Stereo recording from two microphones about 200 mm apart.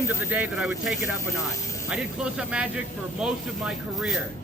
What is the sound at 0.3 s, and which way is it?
Speech, 5° right (ahead or behind).